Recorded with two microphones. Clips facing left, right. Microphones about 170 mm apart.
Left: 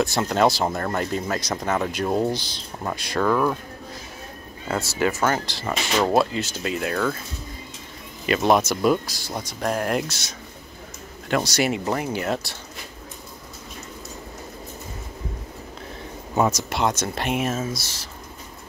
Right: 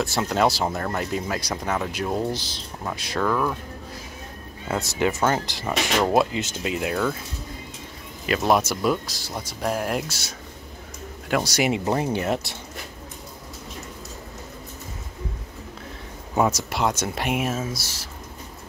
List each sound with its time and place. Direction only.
0.0 s speech: 5° right (ahead or behind)
4.8 s speech: 20° right (ahead or behind)
8.3 s speech: centre (ahead or behind); by 12.5 s 25° right (ahead or behind)
16.3 s speech: 10° right (ahead or behind)